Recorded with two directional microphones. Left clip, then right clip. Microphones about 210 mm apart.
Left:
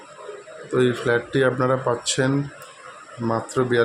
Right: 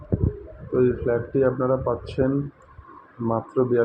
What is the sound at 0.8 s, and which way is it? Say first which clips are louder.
A man's voice: left 1 dB; 15° left (ahead or behind).